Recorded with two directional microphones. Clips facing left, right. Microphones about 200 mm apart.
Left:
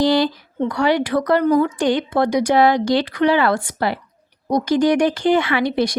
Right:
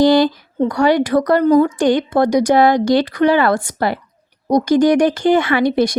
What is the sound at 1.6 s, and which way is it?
Speech, 45° right (ahead or behind).